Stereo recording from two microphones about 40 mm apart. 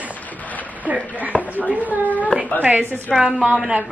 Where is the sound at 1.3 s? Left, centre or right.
Left.